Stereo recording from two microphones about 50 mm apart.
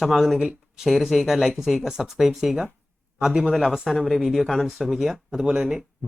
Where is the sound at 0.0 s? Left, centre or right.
Centre.